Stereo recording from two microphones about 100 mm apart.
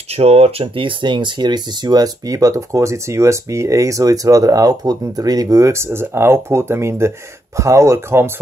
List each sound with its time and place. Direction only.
0.1 s speech: 90° right; by 8.3 s 30° right (ahead or behind)